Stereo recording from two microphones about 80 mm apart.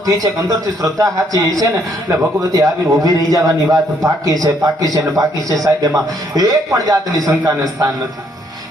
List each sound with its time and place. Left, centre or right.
0.1 s a man's voice: right
2.4 s a man's voice: right